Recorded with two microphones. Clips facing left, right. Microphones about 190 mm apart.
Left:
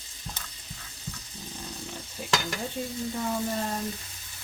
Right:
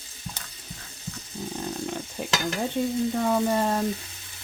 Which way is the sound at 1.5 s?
65° right (ahead or behind).